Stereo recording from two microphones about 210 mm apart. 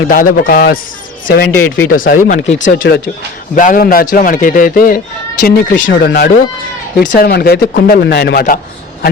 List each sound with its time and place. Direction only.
0.1 s a man's voice: 40° left (ahead or behind)